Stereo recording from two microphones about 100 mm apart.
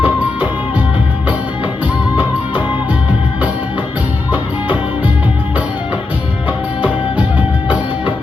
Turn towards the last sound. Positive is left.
turn(degrees=-15)  # may be behind; listen again after turning